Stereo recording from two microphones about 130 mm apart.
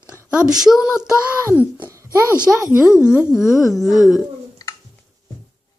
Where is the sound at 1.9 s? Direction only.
25° right (ahead or behind).